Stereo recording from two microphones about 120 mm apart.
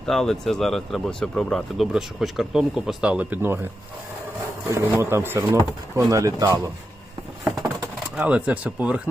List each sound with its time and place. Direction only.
0.0 s speech: 5° left (ahead or behind); by 3.7 s 20° right (ahead or behind)
4.7 s speech: 20° right (ahead or behind)
8.2 s speech: 10° right (ahead or behind)